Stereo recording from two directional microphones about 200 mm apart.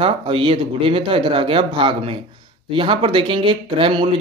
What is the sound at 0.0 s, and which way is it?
Speech, 25° right (ahead or behind).